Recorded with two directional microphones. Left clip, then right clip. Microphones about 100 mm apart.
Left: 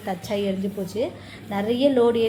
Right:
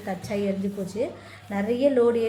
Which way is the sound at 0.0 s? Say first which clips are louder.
Left 2 dB; 25° left (ahead or behind).